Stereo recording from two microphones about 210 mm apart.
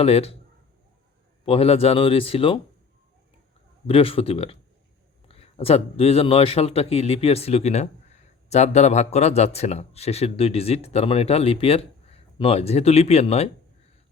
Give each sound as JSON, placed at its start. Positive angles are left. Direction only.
{"t": 0.0, "sound": "a man's voice", "side_deg": 30}
{"t": 1.5, "sound": "a man's voice", "side_deg": 30}
{"t": 3.8, "sound": "a man's voice", "side_deg": 25}